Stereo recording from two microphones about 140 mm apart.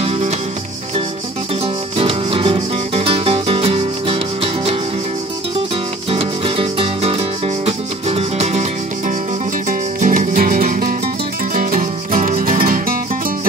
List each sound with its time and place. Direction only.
2.0 s music: 40° right (ahead or behind)
6.0 s music: 40° right (ahead or behind)
9.7 s music: 70° right (ahead or behind)